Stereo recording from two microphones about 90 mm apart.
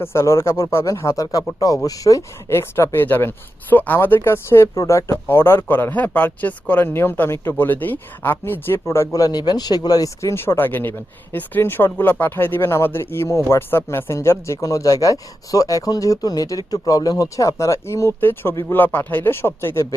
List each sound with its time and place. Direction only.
0.0 s speech: 30° left (ahead or behind)
2.5 s speech: 30° left (ahead or behind)
9.1 s speech: 45° left (ahead or behind); by 19.9 s 30° left (ahead or behind)